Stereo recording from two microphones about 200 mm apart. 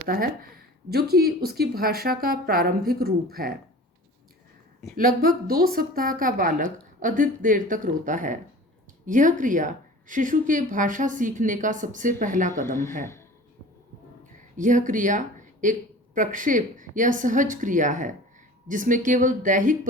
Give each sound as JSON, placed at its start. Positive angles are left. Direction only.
{"t": 0.1, "sound": "speech", "side_deg": -45}
{"t": 4.9, "sound": "a woman's voice", "side_deg": -45}
{"t": 12.6, "sound": "speech", "side_deg": 15}
{"t": 14.5, "sound": "a woman's voice", "side_deg": -40}